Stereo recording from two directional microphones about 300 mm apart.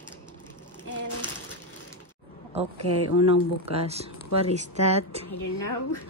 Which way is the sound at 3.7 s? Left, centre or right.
Centre.